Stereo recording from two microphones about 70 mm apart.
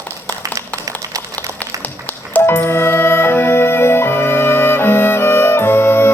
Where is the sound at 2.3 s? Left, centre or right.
Left.